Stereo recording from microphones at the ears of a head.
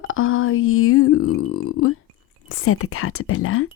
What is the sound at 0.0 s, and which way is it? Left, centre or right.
A woman's voice, left.